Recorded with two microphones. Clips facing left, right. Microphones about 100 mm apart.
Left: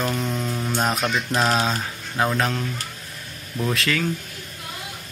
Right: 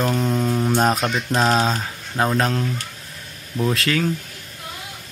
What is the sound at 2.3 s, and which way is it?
Speech, 30° right (ahead or behind).